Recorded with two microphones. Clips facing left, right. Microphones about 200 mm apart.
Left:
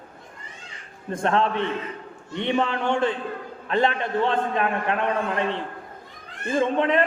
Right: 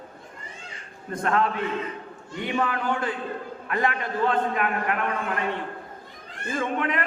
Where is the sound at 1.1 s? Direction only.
25° left (ahead or behind).